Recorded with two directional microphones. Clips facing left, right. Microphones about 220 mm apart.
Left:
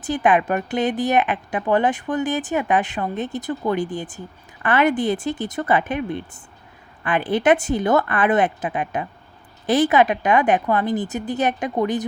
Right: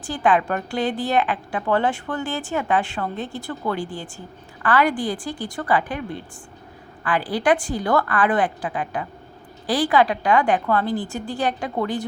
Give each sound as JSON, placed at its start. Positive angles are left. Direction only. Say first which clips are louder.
{"t": 0.0, "sound": "a woman's voice", "louder": "left 2 dB", "side_deg": 20}